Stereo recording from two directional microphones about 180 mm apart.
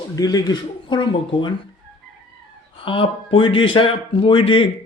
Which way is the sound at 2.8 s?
30° left (ahead or behind).